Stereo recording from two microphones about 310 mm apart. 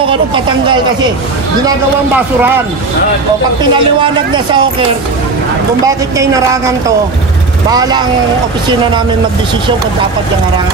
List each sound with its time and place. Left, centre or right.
0.1 s speech: centre
3.7 s speech: centre
5.9 s speech: centre
7.7 s speech: centre